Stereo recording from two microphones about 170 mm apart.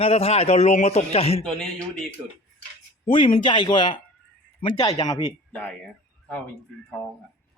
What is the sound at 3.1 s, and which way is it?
Speech, 30° left (ahead or behind).